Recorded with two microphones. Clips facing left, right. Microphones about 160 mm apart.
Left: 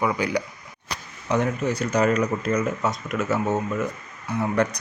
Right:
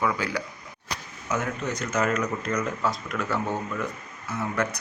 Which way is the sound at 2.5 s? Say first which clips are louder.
Left 3 dB; 30° left (ahead or behind).